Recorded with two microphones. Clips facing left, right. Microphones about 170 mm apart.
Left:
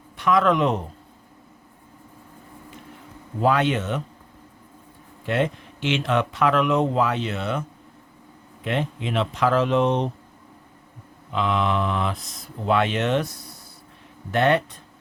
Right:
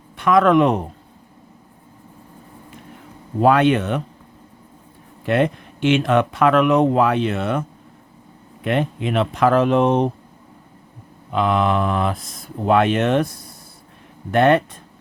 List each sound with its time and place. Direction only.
0.2 s speech: 55° right (ahead or behind)
3.4 s speech: 60° right (ahead or behind)
5.2 s speech: 60° right (ahead or behind)
8.6 s speech: 55° right (ahead or behind)
11.3 s speech: 50° right (ahead or behind)